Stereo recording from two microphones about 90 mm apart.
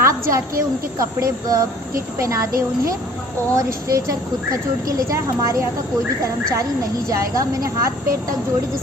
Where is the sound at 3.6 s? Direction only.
40° right (ahead or behind).